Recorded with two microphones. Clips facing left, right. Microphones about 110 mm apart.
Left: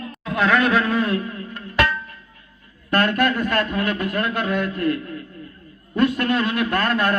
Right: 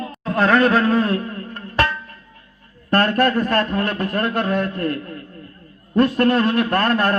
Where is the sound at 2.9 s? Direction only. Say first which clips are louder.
Right 2 dB; 35° right (ahead or behind).